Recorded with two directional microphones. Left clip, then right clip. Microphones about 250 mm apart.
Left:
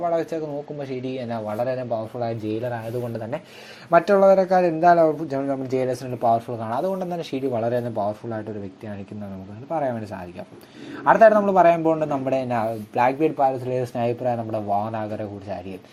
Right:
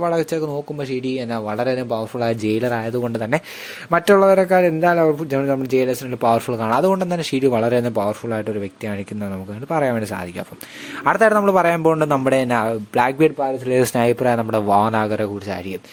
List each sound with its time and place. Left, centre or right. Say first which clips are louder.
0.0 s a man's voice: right 4 dB; right
9.6 s a man's voice: right 5 dB; right